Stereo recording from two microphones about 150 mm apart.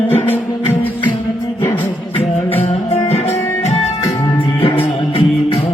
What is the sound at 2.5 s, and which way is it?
Music, 45° left (ahead or behind).